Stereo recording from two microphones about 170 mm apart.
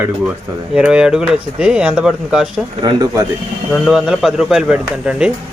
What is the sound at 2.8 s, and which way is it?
Speech, 25° right (ahead or behind).